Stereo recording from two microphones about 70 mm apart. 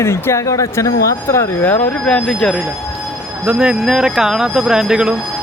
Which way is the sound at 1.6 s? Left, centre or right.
Left.